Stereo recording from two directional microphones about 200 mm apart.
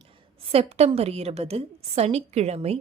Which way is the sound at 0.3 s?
30° right (ahead or behind).